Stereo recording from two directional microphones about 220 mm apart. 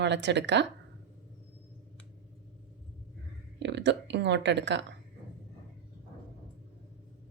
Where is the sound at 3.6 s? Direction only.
50° right (ahead or behind).